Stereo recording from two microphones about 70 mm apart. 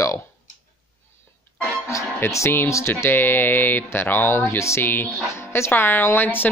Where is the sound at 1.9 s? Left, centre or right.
Left.